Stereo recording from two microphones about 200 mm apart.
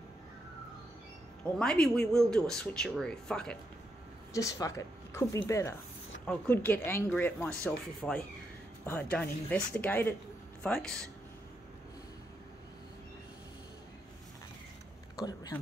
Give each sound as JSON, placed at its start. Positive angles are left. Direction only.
{"t": 1.6, "sound": "speech", "side_deg": 5}
{"t": 4.3, "sound": "speech", "side_deg": 15}
{"t": 15.1, "sound": "speech", "side_deg": 20}